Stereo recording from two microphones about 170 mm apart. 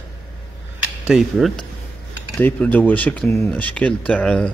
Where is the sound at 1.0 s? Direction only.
Centre (ahead or behind).